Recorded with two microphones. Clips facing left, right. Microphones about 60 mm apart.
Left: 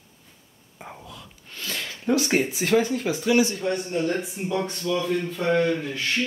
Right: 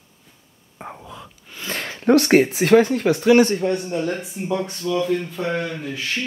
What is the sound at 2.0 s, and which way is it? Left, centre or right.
Speech, right.